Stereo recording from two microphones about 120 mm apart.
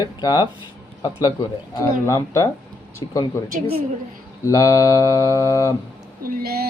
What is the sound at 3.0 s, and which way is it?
Speech, 35° left (ahead or behind).